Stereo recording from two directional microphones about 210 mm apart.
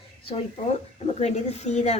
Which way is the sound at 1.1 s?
35° left (ahead or behind).